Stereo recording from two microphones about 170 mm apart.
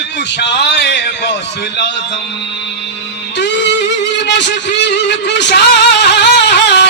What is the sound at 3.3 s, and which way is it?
Music, 90° left.